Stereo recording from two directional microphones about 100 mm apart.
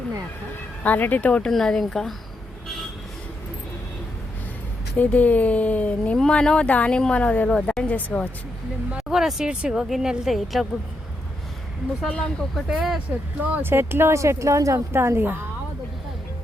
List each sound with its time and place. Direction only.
0.9 s speech: 15° left (ahead or behind)
4.9 s speech: 15° left (ahead or behind)
9.0 s a woman's voice: 5° right (ahead or behind)
12.0 s speech: 10° left (ahead or behind)
12.6 s a woman's voice: 5° right (ahead or behind)
13.4 s speech: 20° right (ahead or behind)